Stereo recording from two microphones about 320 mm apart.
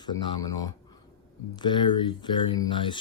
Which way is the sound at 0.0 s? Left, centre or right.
Centre.